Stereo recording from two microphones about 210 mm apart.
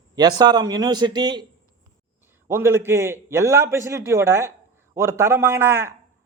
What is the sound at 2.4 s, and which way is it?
A man's voice, 10° right (ahead or behind).